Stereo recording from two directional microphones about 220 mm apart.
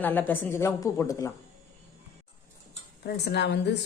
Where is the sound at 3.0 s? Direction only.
50° left (ahead or behind).